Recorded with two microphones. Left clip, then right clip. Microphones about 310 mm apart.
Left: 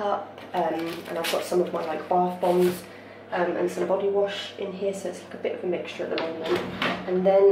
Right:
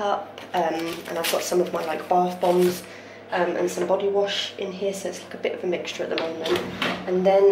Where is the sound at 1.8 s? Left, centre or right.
Centre.